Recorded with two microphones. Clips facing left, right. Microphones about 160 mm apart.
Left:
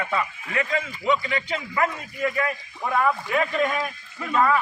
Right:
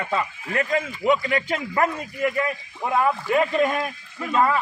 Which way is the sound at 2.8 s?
20° right (ahead or behind).